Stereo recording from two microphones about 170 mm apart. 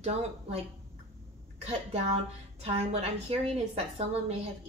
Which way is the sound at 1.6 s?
40° right (ahead or behind).